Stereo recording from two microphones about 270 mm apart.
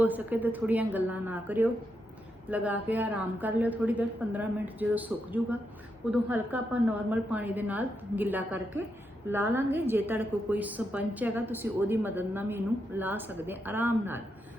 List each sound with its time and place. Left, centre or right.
0.0 s a woman's voice: centre